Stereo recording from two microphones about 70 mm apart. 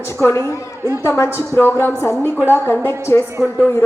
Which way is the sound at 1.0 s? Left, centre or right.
Left.